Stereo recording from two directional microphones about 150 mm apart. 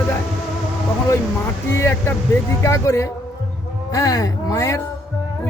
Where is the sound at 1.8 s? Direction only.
15° left (ahead or behind).